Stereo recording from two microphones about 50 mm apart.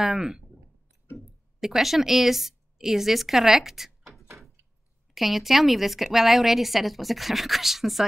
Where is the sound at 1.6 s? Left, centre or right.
Centre.